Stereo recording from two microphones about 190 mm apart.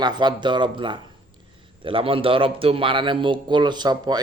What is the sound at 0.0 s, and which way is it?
Speech, 25° right (ahead or behind).